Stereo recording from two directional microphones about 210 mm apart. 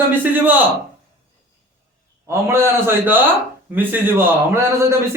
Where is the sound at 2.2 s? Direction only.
10° right (ahead or behind).